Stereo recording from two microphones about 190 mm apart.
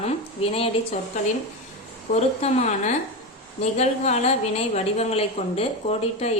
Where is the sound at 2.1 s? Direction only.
35° left (ahead or behind).